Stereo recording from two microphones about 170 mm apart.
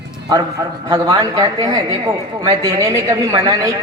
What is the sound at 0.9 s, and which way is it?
A woman's voice, 25° right (ahead or behind).